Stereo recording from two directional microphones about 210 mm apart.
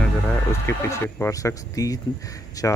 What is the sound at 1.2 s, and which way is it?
Speech, 15° left (ahead or behind).